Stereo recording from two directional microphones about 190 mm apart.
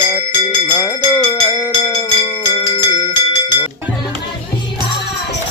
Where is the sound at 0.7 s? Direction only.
15° left (ahead or behind).